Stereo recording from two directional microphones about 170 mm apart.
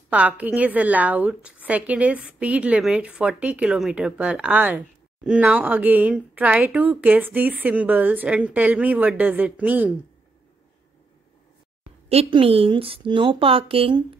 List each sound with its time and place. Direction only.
0.1 s a woman's voice: 10° right (ahead or behind)
12.1 s speech: 35° right (ahead or behind)